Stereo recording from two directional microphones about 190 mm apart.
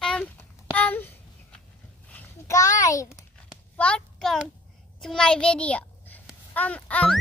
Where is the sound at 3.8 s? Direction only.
5° left (ahead or behind).